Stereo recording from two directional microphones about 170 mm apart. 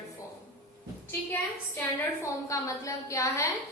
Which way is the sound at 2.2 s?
20° left (ahead or behind).